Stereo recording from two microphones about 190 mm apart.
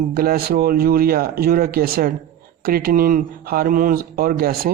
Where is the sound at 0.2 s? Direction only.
50° right (ahead or behind).